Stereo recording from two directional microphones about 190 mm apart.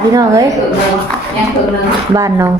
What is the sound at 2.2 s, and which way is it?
Speech, 15° right (ahead or behind).